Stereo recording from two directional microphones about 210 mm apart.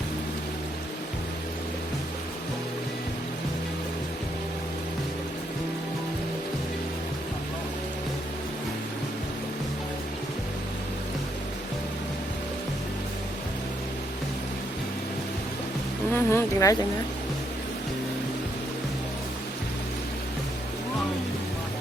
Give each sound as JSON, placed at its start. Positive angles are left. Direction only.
{"t": 16.1, "sound": "speech", "side_deg": 10}